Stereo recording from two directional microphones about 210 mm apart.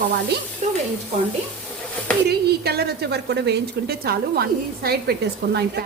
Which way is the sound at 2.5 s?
50° right (ahead or behind).